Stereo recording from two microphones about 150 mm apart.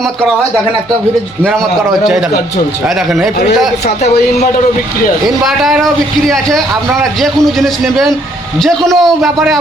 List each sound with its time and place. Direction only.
0.0 s a man's voice: centre (ahead or behind)
2.8 s a man's voice: centre (ahead or behind)
3.8 s a man's voice: 50° left (ahead or behind)
5.5 s a man's voice: centre (ahead or behind)